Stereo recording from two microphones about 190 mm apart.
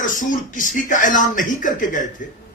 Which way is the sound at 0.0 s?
45° left (ahead or behind).